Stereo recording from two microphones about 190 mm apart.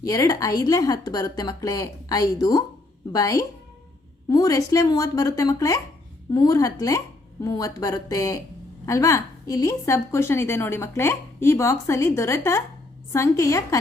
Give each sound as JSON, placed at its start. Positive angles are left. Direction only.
{"t": 0.0, "sound": "a woman's voice", "side_deg": 15}